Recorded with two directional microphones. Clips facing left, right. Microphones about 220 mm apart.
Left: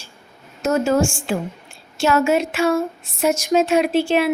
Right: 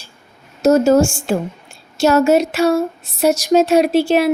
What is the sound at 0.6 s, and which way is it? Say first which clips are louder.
A woman's voice: right 6 dB; 40° right (ahead or behind).